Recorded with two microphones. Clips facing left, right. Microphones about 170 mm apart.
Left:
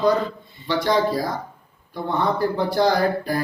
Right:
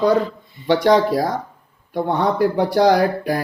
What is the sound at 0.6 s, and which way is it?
Speech, 65° right (ahead or behind).